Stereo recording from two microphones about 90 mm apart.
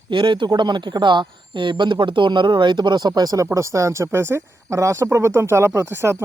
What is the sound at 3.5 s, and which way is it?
Speech, 35° right (ahead or behind).